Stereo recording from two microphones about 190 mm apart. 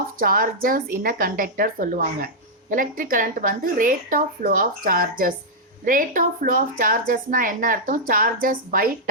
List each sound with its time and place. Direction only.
0.2 s speech: 50° right (ahead or behind)